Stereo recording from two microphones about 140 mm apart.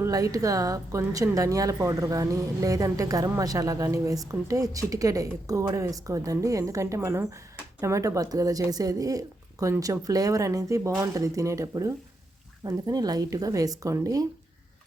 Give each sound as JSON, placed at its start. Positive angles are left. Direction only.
{"t": 0.0, "sound": "a woman's voice", "side_deg": -25}